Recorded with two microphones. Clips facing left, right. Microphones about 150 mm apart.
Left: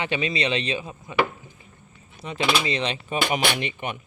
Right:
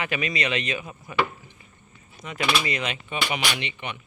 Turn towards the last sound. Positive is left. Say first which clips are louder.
# left 4 dB
turn(degrees=45)  # may be behind; listen again after turning